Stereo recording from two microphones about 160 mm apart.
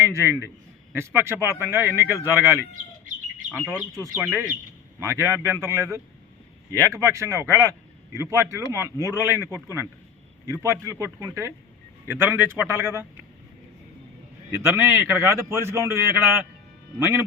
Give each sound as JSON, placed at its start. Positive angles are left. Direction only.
{"t": 0.0, "sound": "a man's voice", "side_deg": -15}
{"t": 3.7, "sound": "a man's voice", "side_deg": -15}
{"t": 12.0, "sound": "a man's voice", "side_deg": -15}
{"t": 14.5, "sound": "a man's voice", "side_deg": -15}